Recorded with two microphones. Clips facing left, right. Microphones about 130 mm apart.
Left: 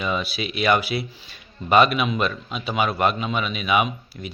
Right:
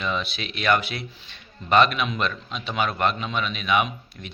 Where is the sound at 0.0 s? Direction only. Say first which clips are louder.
Left 3 dB; 5° left (ahead or behind).